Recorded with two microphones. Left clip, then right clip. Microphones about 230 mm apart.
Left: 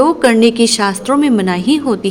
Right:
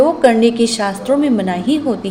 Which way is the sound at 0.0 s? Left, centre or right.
Left.